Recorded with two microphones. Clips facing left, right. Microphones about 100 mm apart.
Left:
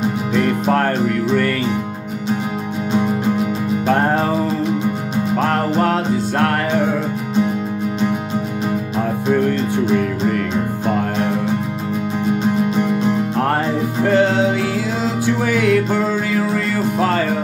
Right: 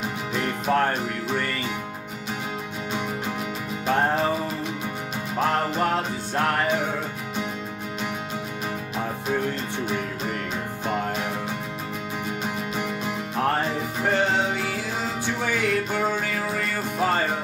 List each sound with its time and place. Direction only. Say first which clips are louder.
0.7 s music: left 6 dB; 80° left
3.8 s music: left 5 dB; 60° left (ahead or behind)
5.8 s music: left 8 dB; 75° left (ahead or behind)
14.0 s music: left 7 dB; 90° left
15.4 s music: left 8 dB; 90° left
17.0 s music: left 4 dB; 90° left